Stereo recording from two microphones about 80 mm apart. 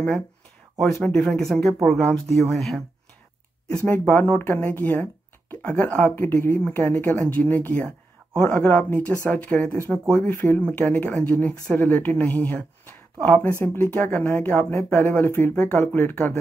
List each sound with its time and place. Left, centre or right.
0.7 s speech: centre
3.8 s speech: left